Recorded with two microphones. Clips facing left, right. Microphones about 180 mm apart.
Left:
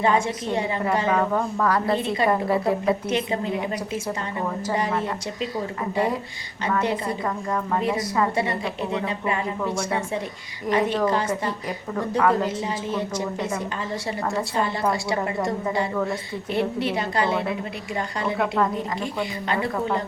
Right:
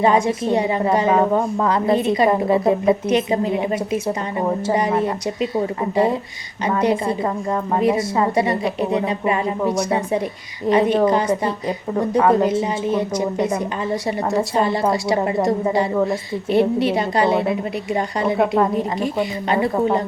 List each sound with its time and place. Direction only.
0.0 s a woman's voice: 20° right (ahead or behind)